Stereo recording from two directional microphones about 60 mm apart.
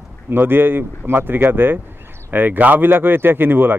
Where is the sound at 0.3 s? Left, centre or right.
Right.